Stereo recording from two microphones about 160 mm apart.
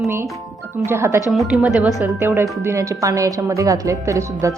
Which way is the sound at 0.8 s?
15° right (ahead or behind).